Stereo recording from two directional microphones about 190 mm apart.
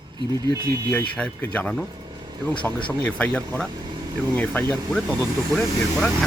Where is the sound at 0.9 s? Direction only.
5° left (ahead or behind).